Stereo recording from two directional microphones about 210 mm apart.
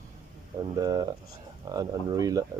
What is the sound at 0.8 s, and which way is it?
Speech, 20° right (ahead or behind).